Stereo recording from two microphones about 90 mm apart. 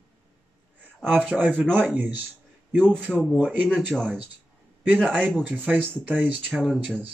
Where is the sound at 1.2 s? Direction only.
15° right (ahead or behind).